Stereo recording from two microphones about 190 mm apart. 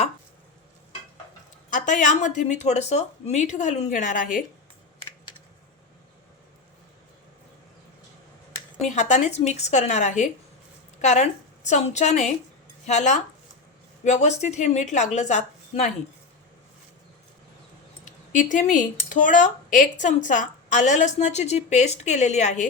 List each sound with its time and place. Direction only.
1.7 s speech: 40° left (ahead or behind)
9.0 s a woman's voice: 40° left (ahead or behind)
18.0 s speech: 40° left (ahead or behind)